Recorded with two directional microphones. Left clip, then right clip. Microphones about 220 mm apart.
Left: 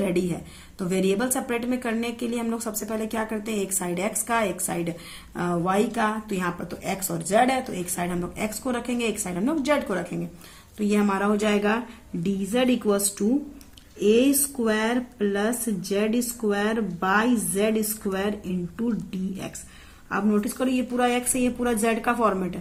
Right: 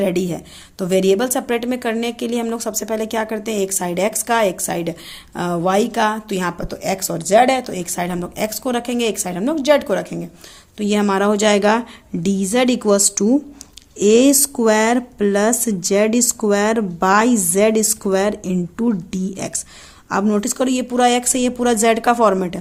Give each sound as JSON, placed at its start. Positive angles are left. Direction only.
{"t": 0.0, "sound": "a woman's voice", "side_deg": -45}